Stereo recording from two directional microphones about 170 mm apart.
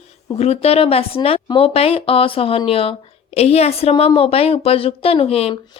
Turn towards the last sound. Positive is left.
turn(degrees=35)  # may be behind; listen again after turning